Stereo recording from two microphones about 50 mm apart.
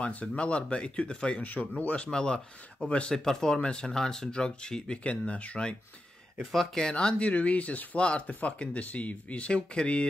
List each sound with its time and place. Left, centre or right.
0.0 s speech: left
2.0 s speech: centre
3.3 s speech: centre
6.5 s speech: centre
7.2 s speech: left